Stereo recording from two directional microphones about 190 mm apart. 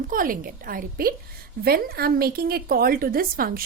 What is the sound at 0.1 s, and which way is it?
A woman's voice, 45° right (ahead or behind).